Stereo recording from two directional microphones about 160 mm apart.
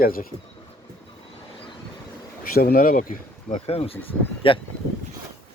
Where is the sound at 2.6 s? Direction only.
65° left (ahead or behind).